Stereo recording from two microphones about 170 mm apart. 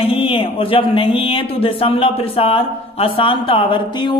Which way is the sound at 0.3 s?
30° left (ahead or behind).